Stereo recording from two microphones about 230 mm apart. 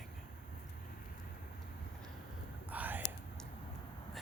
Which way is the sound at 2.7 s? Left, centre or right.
Centre.